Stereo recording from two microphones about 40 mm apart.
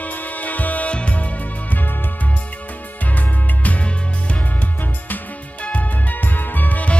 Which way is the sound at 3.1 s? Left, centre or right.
Left.